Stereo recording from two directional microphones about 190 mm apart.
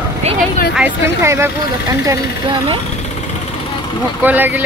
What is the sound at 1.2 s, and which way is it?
Speech, 15° right (ahead or behind).